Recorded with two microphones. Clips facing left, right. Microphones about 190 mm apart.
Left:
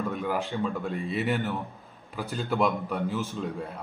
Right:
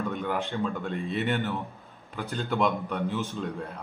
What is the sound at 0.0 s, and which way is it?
A man's voice, centre (ahead or behind).